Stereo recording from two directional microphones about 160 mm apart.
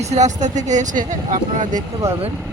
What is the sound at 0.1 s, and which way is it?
Speech, 45° right (ahead or behind).